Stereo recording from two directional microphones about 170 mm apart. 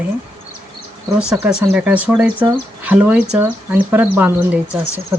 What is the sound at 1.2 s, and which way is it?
Speech, 5° right (ahead or behind).